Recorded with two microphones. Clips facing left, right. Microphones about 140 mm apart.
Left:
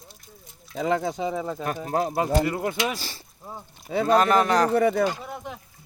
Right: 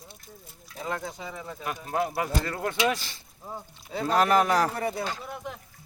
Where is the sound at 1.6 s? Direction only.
40° left (ahead or behind).